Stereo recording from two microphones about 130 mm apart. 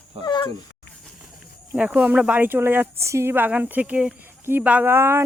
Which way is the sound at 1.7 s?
10° right (ahead or behind).